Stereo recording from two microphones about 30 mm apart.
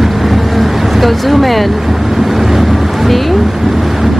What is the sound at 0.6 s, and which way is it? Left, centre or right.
Vehicle, centre.